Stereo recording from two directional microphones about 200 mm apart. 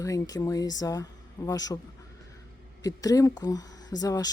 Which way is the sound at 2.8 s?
15° left (ahead or behind).